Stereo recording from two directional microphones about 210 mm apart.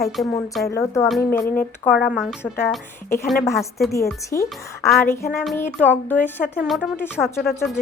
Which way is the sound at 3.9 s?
15° left (ahead or behind).